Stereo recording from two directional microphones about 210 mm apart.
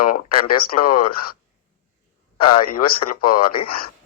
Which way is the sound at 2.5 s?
45° left (ahead or behind).